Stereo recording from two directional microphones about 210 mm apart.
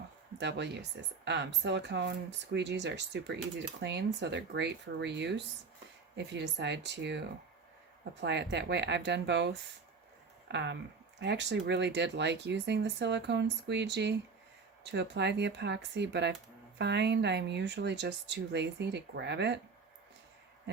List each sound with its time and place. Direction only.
0.3 s speech: 55° right (ahead or behind)
8.2 s speech: 55° right (ahead or behind)